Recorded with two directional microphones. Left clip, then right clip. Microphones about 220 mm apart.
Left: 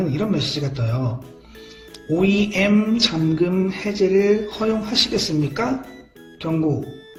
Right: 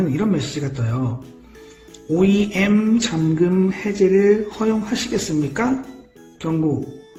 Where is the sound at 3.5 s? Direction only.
10° right (ahead or behind).